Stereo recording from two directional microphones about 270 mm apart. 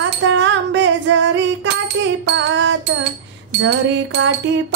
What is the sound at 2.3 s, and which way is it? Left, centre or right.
Music, right.